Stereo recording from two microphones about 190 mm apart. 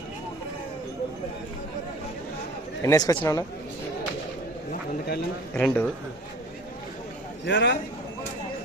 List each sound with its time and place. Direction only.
2.8 s speech: 20° left (ahead or behind)
4.7 s a sound: 60° left (ahead or behind)
5.5 s speech: 10° left (ahead or behind)
7.4 s a man's voice: 65° left (ahead or behind)